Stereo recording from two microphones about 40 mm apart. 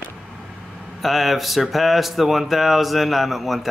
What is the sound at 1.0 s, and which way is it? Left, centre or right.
Speech, centre.